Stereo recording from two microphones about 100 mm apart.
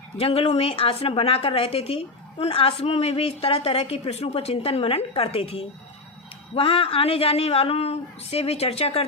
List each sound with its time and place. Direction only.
0.2 s a woman's voice: 80° left